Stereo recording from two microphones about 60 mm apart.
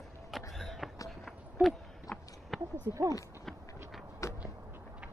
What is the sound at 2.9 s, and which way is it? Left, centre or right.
Speech, right.